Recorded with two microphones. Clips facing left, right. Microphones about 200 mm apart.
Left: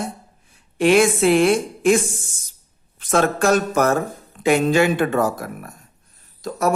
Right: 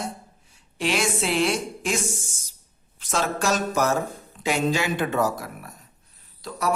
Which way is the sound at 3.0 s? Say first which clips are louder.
Left 7 dB; 55° left (ahead or behind).